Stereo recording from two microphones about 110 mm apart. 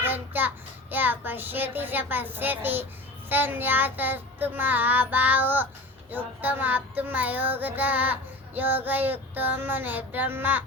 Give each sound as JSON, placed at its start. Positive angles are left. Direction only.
{"t": 0.0, "sound": "child singing", "side_deg": -15}